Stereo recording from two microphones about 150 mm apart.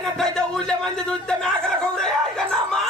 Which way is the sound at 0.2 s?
5° left (ahead or behind).